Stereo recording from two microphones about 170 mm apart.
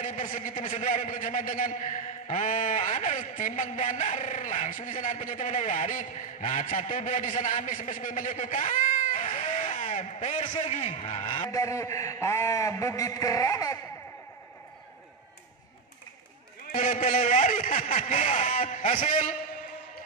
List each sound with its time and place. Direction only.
0.0 s a man's voice: 50° left (ahead or behind)
11.4 s a man's voice: 20° left (ahead or behind)
16.7 s a man's voice: 50° left (ahead or behind)